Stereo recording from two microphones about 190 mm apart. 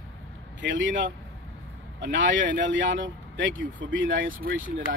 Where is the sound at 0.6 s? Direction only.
75° right (ahead or behind).